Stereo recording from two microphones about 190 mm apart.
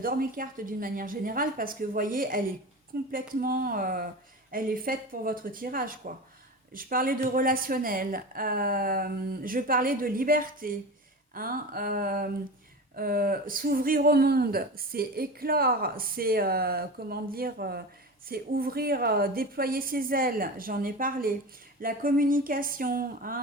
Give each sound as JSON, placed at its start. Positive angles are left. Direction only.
{"t": 0.0, "sound": "speech", "side_deg": -50}